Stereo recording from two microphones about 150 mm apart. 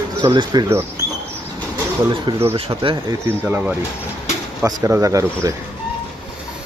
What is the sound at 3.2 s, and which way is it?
Speech, 15° right (ahead or behind).